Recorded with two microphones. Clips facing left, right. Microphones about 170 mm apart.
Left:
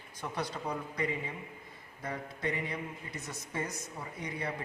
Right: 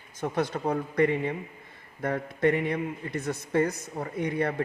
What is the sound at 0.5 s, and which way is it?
A man's voice, 55° right (ahead or behind).